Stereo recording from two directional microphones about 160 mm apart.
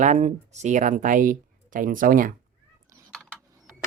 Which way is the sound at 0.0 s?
45° right (ahead or behind).